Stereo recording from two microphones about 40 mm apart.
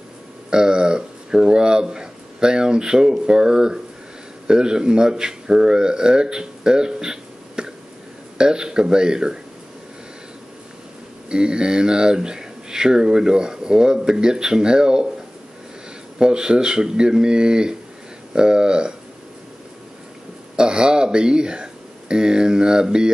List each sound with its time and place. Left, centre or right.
0.5 s speech: right
11.2 s speech: right
16.2 s speech: right
20.5 s speech: right